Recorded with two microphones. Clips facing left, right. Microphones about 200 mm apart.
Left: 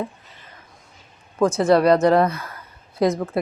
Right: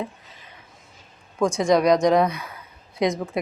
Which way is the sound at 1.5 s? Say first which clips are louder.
Left 2 dB; 15° right (ahead or behind).